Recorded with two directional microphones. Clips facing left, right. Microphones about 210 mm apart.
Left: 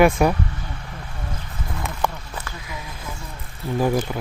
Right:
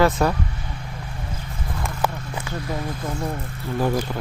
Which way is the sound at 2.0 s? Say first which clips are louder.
Even; 5° right (ahead or behind).